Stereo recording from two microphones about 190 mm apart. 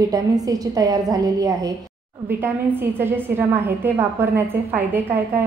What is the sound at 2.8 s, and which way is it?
A woman's voice, 10° right (ahead or behind).